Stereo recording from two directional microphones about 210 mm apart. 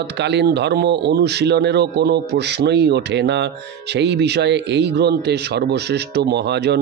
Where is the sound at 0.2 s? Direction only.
55° right (ahead or behind).